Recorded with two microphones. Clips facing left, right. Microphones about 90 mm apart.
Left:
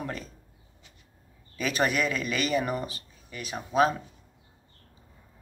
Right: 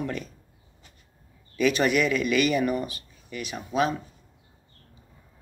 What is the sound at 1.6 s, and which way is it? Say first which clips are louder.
Speech: right 5 dB; 35° left (ahead or behind).